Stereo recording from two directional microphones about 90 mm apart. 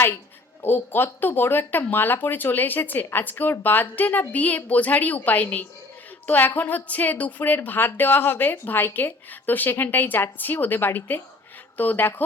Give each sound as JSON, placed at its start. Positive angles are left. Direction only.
{"t": 0.6, "sound": "speech", "side_deg": 25}